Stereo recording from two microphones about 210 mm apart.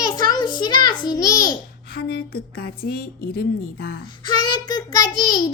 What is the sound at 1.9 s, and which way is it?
A woman's voice, 50° left (ahead or behind).